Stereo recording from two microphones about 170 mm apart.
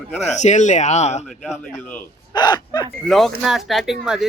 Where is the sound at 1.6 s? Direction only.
10° left (ahead or behind).